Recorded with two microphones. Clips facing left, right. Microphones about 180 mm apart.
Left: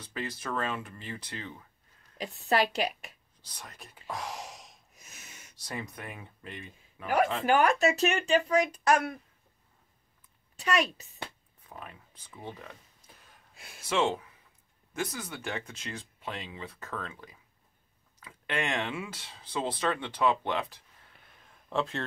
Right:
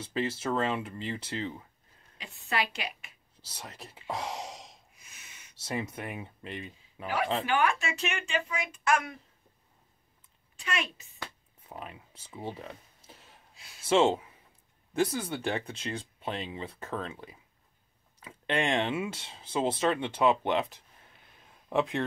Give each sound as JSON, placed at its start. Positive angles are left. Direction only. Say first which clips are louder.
{"t": 0.0, "sound": "speech", "louder": "right 6 dB", "side_deg": -25}
{"t": 2.1, "sound": "speech", "louder": "left 6 dB", "side_deg": 40}
{"t": 3.5, "sound": "speech", "louder": "right 3 dB", "side_deg": -25}
{"t": 4.1, "sound": "gasp", "louder": "right 3 dB", "side_deg": -25}
{"t": 4.9, "sound": "a sound", "louder": "left 4 dB", "side_deg": 40}
{"t": 5.6, "sound": "speech", "louder": "right 5 dB", "side_deg": -25}
{"t": 7.4, "sound": "speech", "louder": "left 4 dB", "side_deg": 40}
{"t": 10.5, "sound": "a woman's voice", "louder": "left 6 dB", "side_deg": 40}
{"t": 11.7, "sound": "speech", "louder": "right 3 dB", "side_deg": -20}
{"t": 12.4, "sound": "a sound", "louder": "right 4 dB", "side_deg": -25}
{"t": 13.6, "sound": "a sound", "louder": "left 8 dB", "side_deg": 55}
{"t": 13.8, "sound": "a man's voice", "louder": "right 4 dB", "side_deg": -25}